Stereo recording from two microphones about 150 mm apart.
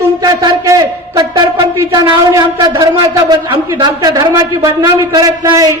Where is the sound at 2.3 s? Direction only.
20° right (ahead or behind).